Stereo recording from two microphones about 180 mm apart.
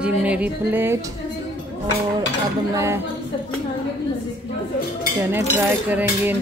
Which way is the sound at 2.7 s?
15° right (ahead or behind).